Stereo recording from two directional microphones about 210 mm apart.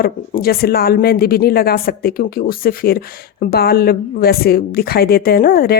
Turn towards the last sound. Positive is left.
turn(degrees=45)  # may be behind; listen again after turning